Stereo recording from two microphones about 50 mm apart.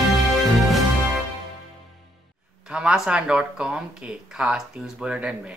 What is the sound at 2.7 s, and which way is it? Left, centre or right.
Speech, centre.